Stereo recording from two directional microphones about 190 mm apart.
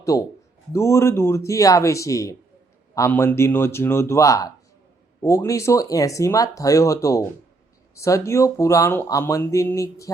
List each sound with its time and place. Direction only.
0.0 s speech: 15° left (ahead or behind)